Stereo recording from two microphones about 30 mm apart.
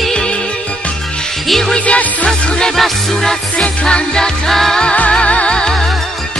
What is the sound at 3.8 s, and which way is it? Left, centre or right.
Music, left.